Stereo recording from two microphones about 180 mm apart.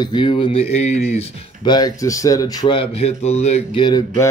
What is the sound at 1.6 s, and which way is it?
Speech, 20° left (ahead or behind).